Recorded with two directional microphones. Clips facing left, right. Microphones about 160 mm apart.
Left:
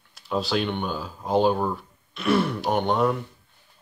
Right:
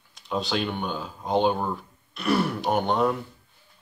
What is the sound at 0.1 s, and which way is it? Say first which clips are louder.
Speech: left 2 dB; centre (ahead or behind).